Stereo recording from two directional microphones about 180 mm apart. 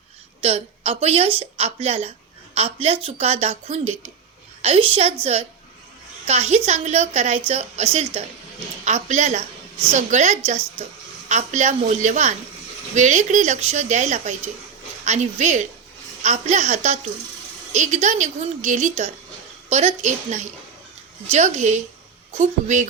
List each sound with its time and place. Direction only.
0.4 s a woman's voice: 35° right (ahead or behind)